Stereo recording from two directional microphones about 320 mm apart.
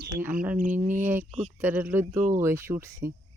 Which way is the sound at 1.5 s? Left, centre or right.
Centre.